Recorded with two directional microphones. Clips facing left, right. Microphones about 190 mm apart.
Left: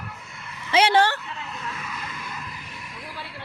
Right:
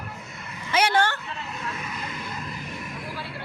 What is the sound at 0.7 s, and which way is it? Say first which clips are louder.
Speech: left 3 dB; 30° left (ahead or behind).